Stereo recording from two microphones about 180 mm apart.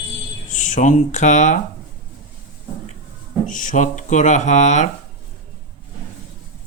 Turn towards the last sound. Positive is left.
turn(degrees=40)  # may be behind; listen again after turning